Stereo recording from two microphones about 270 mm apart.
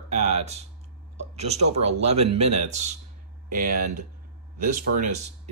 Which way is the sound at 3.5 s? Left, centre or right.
Right.